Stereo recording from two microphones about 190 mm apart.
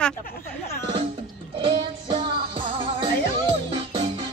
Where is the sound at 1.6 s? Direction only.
25° right (ahead or behind).